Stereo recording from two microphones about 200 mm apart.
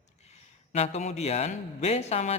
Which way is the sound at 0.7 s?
35° left (ahead or behind).